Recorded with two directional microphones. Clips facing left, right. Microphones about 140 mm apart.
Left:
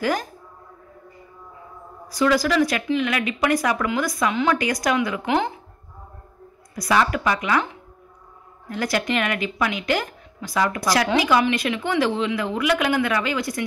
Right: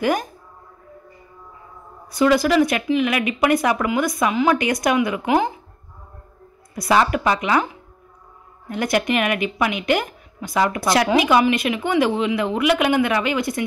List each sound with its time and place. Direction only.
0.0 s speech: 20° right (ahead or behind)
2.1 s speech: 20° right (ahead or behind)
4.3 s speech: 10° right (ahead or behind)
4.6 s speech: 25° right (ahead or behind)
6.7 s speech: 25° right (ahead or behind)
8.6 s speech: 20° right (ahead or behind)